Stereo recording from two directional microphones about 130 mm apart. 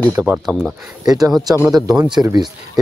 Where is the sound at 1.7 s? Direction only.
30° right (ahead or behind).